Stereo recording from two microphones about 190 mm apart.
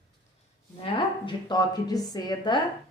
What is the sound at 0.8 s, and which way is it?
A woman's voice, 25° left (ahead or behind).